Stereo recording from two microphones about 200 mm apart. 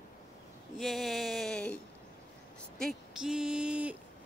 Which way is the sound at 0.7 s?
Centre (ahead or behind).